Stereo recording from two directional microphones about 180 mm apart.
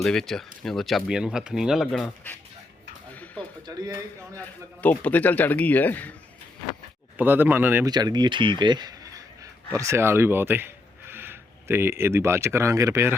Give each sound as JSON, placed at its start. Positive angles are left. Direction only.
{"t": 0.0, "sound": "speech", "side_deg": 5}
{"t": 3.7, "sound": "speech", "side_deg": -20}
{"t": 4.8, "sound": "speech", "side_deg": 10}
{"t": 7.2, "sound": "speech", "side_deg": -10}
{"t": 7.9, "sound": "speech", "side_deg": -25}